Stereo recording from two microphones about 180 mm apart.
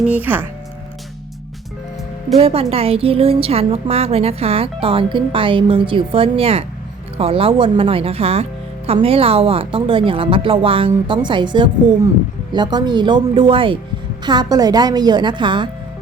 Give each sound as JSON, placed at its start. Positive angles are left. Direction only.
{"t": 0.0, "sound": "speech", "side_deg": -10}
{"t": 2.3, "sound": "a woman's voice", "side_deg": -30}